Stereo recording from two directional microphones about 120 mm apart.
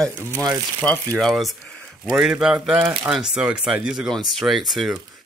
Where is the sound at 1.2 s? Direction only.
Centre (ahead or behind).